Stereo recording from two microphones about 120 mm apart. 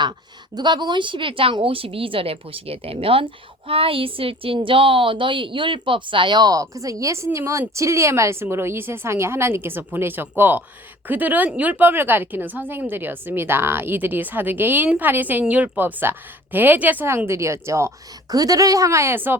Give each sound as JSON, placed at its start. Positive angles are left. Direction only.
{"t": 0.5, "sound": "a woman's voice", "side_deg": -40}